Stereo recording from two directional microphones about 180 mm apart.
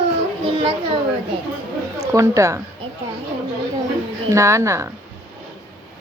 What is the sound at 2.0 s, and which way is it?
Speech, 15° right (ahead or behind).